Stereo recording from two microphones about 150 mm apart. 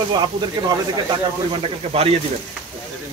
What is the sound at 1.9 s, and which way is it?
Speech, 40° right (ahead or behind).